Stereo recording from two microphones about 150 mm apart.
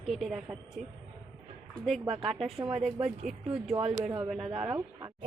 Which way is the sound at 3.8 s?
40° right (ahead or behind).